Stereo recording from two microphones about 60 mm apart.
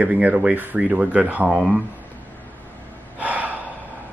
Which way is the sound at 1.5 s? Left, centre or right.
Centre.